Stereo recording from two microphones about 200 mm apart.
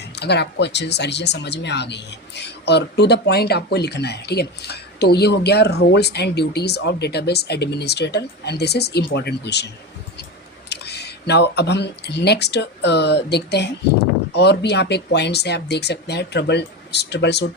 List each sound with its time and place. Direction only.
0.0 s speech: 55° left (ahead or behind)
10.7 s speech: 55° left (ahead or behind)